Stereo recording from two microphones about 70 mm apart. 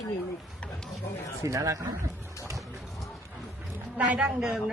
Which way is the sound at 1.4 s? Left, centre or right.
Right.